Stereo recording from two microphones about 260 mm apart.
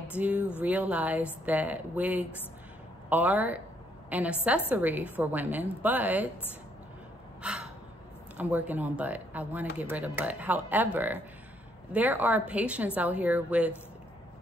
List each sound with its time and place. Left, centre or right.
0.1 s a woman's voice: centre
7.4 s gasp: centre
8.4 s speech: centre